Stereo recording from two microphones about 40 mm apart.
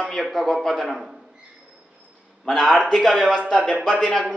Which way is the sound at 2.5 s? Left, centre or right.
Centre.